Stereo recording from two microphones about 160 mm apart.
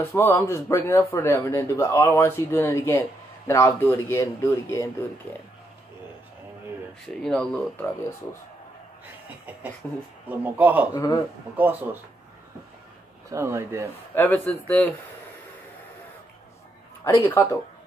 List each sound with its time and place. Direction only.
0.0 s speech: 15° left (ahead or behind)
7.2 s speech: 5° left (ahead or behind)
10.2 s a man's voice: 10° right (ahead or behind)
10.9 s speech: 25° left (ahead or behind)
11.5 s a man's voice: 10° right (ahead or behind)
13.3 s a man's voice: 15° right (ahead or behind)
14.1 s speech: 10° left (ahead or behind)
17.0 s speech: 15° left (ahead or behind)